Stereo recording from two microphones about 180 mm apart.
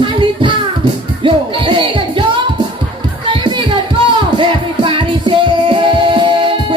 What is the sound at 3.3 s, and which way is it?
Music, 25° right (ahead or behind).